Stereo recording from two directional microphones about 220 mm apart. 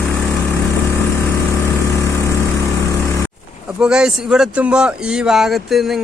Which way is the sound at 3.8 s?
5° right (ahead or behind).